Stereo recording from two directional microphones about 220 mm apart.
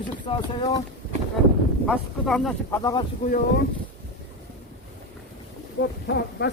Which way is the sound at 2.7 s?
15° left (ahead or behind).